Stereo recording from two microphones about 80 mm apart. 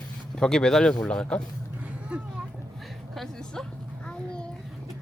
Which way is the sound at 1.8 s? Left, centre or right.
Centre.